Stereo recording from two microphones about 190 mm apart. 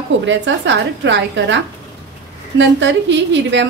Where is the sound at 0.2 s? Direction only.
70° right (ahead or behind).